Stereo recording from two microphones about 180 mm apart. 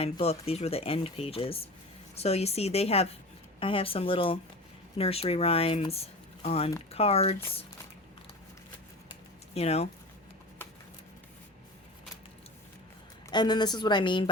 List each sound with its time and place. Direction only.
0.0 s speech: 35° left (ahead or behind)
9.6 s speech: 35° left (ahead or behind)
13.3 s speech: 25° left (ahead or behind)